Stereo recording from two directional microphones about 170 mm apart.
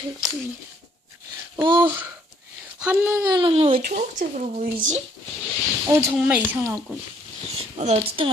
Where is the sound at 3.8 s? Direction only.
55° right (ahead or behind).